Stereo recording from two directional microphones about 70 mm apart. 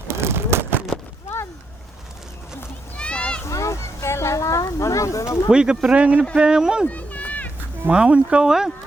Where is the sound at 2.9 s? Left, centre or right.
Centre.